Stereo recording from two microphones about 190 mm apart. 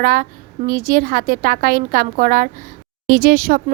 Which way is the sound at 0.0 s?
50° right (ahead or behind).